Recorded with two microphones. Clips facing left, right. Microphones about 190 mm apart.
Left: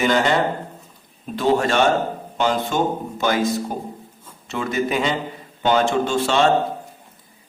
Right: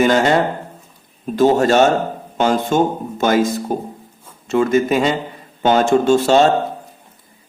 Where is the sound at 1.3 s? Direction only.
45° right (ahead or behind).